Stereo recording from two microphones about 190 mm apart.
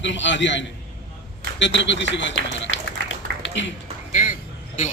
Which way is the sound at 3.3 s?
60° right (ahead or behind).